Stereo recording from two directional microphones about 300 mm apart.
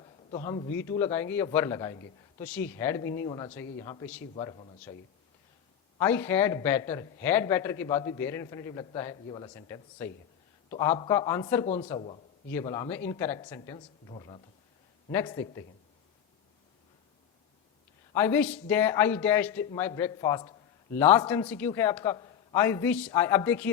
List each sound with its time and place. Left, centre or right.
0.3 s speech: centre
6.0 s speech: centre
11.1 s a man's voice: centre
18.1 s speech: centre